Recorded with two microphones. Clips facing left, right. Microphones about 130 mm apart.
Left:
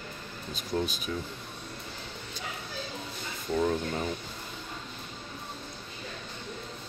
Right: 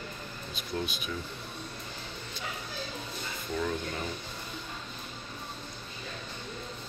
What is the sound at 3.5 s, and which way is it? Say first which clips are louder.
Speech: left 5 dB; 30° left (ahead or behind).